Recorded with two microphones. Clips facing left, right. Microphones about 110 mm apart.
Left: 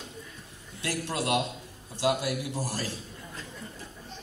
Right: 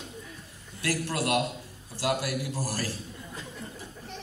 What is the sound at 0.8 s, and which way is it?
A man's voice, 20° left (ahead or behind).